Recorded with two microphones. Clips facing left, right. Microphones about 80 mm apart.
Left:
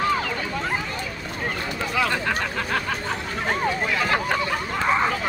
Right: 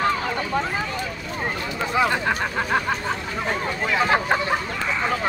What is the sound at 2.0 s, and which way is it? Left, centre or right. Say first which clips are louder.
Speech: right 3 dB; right.